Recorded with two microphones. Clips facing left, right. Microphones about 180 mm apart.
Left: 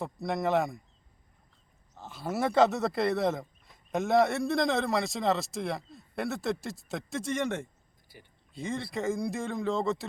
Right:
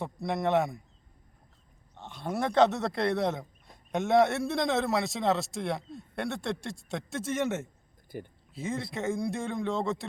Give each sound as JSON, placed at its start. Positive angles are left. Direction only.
{"t": 0.0, "sound": "a man's voice", "side_deg": 0}
{"t": 2.0, "sound": "a man's voice", "side_deg": 5}
{"t": 8.1, "sound": "speech", "side_deg": -50}
{"t": 8.5, "sound": "a man's voice", "side_deg": 0}